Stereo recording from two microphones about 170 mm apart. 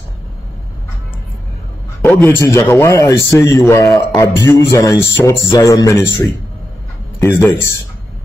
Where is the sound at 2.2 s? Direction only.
15° left (ahead or behind).